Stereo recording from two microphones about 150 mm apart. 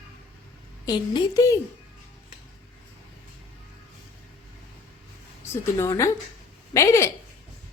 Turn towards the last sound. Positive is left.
turn(degrees=20)  # may be behind; listen again after turning